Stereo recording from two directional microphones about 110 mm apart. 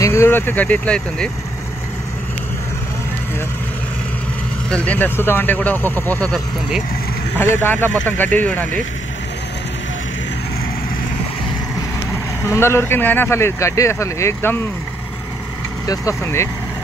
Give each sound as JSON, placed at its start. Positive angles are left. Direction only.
{"t": 0.0, "sound": "speech", "side_deg": 25}
{"t": 4.6, "sound": "speech", "side_deg": 10}
{"t": 7.3, "sound": "speech", "side_deg": 20}
{"t": 12.4, "sound": "speech", "side_deg": 25}
{"t": 15.9, "sound": "speech", "side_deg": 25}